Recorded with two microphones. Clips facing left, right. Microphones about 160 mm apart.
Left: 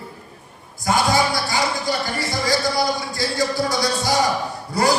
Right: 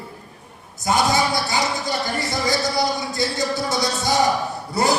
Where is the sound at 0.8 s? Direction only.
20° right (ahead or behind).